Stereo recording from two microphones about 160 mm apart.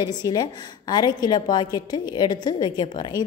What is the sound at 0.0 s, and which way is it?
A woman's voice, 25° left (ahead or behind).